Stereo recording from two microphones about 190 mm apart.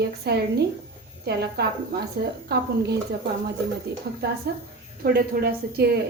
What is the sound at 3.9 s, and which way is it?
A woman's voice, 60° right (ahead or behind).